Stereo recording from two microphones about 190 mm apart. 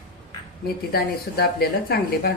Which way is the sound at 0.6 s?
55° left (ahead or behind).